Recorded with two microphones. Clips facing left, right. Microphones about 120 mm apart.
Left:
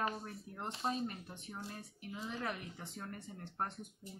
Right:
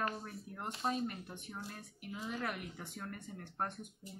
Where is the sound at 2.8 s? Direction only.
25° left (ahead or behind).